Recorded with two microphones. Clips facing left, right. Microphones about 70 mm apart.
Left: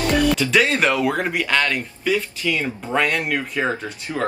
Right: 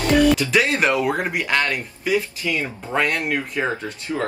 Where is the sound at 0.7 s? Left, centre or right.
Centre.